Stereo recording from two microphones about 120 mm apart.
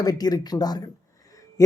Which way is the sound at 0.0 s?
30° left (ahead or behind).